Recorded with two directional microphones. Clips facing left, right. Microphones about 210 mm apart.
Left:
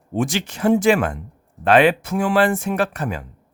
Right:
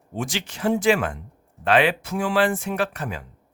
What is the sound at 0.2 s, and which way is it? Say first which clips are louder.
Speech: left 6 dB; 50° left (ahead or behind).